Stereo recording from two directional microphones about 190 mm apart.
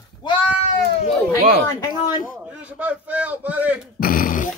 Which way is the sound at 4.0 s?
50° left (ahead or behind).